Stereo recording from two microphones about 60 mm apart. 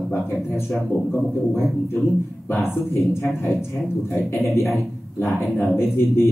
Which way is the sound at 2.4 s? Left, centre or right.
Left.